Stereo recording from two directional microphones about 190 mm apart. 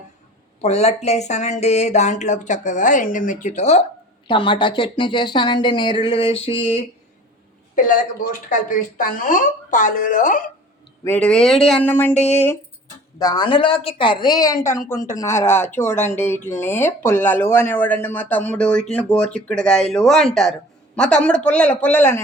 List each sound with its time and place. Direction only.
0.6 s speech: 35° left (ahead or behind)
7.8 s speech: 45° left (ahead or behind)
11.0 s speech: 10° left (ahead or behind)
12.1 s speech: 35° left (ahead or behind)
13.1 s speech: 20° left (ahead or behind)